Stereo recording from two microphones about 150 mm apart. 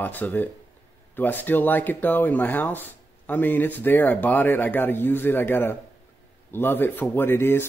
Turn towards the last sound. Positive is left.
turn(degrees=15)  # may be behind; listen again after turning